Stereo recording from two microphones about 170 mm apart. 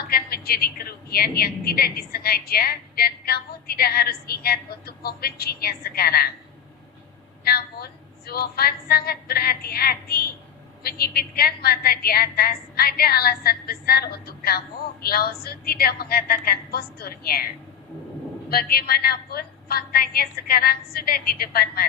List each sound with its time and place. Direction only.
0.1 s a woman's voice: 65° left (ahead or behind)
7.4 s a woman's voice: 65° left (ahead or behind)